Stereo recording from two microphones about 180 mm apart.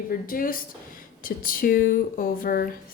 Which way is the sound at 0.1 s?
50° left (ahead or behind).